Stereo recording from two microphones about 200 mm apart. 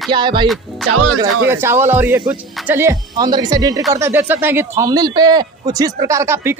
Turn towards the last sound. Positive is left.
turn(degrees=-10)  # may be behind; listen again after turning